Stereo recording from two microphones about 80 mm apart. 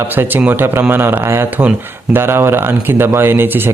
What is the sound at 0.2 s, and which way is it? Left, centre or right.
A man's voice, right.